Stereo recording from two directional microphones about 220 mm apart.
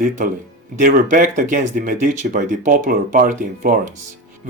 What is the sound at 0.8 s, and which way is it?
Speech, 35° right (ahead or behind).